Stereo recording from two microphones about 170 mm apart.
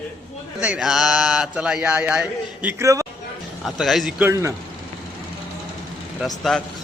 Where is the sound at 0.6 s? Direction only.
5° right (ahead or behind).